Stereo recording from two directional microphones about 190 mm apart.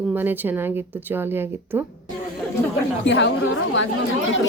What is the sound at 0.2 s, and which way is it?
Speech, 10° right (ahead or behind).